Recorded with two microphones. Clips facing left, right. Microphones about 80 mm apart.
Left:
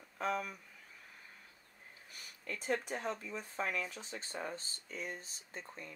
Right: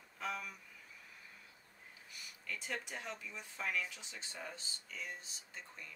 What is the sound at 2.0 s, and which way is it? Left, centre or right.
Speech, left.